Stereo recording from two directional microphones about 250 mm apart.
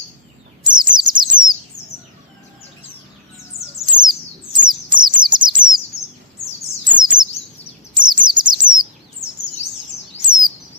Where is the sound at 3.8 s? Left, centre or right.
Centre.